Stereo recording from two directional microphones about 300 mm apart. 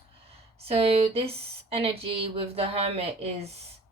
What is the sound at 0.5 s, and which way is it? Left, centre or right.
A woman's voice, centre.